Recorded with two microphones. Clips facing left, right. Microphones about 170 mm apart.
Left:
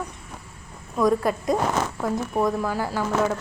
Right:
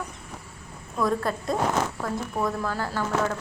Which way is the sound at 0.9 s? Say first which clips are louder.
Left 5 dB; 15° left (ahead or behind).